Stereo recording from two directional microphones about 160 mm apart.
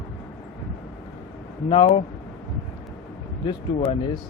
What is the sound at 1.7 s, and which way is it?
Speech, 35° left (ahead or behind).